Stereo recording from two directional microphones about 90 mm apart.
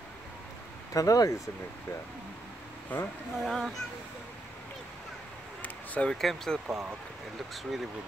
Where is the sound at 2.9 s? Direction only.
20° left (ahead or behind).